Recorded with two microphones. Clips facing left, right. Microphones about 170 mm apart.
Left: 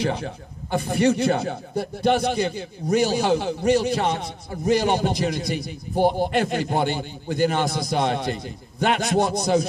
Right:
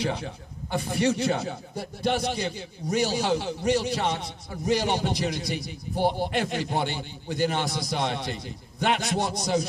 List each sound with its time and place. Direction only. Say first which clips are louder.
0.0 s speech: left 4 dB; 50° left (ahead or behind)